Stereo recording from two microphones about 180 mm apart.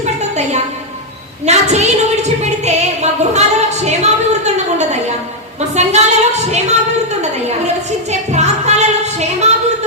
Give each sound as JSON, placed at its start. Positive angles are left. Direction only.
{"t": 0.0, "sound": "a sound", "side_deg": -40}
{"t": 5.5, "sound": "a woman's voice", "side_deg": -40}
{"t": 8.3, "sound": "music", "side_deg": -40}